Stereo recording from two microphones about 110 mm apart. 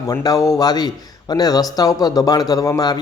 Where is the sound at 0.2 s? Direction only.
35° left (ahead or behind).